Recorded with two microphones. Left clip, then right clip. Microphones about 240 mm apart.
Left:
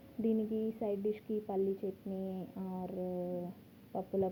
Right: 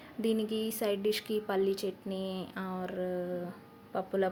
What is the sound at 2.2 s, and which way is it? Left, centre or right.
Speech, right.